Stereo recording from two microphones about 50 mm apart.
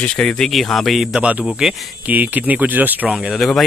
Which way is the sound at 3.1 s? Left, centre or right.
Centre.